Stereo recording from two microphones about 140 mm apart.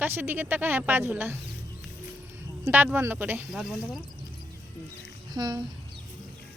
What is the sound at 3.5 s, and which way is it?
Speech, centre (ahead or behind).